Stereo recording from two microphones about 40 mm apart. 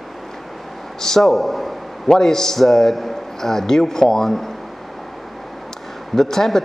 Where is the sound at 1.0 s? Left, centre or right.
Centre.